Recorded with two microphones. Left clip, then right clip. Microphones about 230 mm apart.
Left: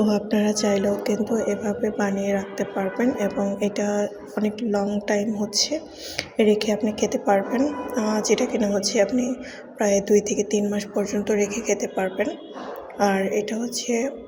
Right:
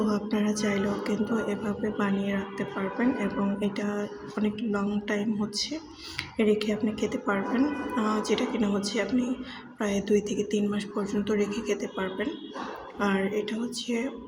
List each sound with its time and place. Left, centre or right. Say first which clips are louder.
0.0 s a woman's voice: left 7 dB; centre